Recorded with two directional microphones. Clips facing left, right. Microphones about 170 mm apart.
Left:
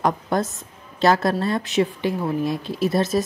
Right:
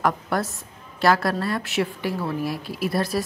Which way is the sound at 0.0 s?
20° left (ahead or behind).